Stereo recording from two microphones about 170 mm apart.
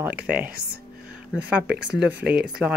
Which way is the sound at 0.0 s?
10° right (ahead or behind).